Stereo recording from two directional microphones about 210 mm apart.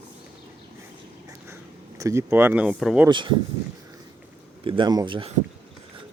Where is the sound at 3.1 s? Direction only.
20° right (ahead or behind).